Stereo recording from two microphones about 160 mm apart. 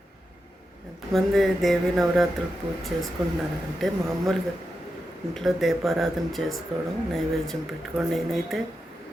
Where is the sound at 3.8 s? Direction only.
Centre (ahead or behind).